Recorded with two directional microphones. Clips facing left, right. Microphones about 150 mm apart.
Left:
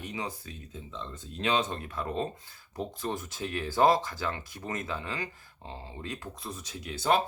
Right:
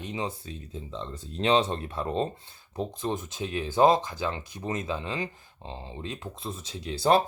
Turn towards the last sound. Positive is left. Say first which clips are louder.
# right 4 dB
turn(degrees=-35)  # may be behind; listen again after turning